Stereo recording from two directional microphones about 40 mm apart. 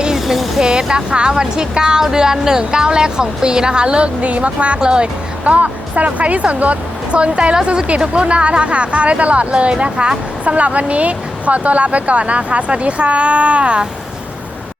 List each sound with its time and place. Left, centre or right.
0.3 s vehicle: centre
0.6 s speech: centre
5.5 s a woman's voice: right